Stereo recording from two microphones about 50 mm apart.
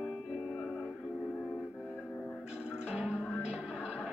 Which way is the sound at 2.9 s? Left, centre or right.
Centre.